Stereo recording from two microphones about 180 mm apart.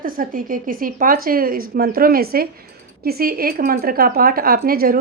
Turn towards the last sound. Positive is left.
turn(degrees=-55)  # may be behind; listen again after turning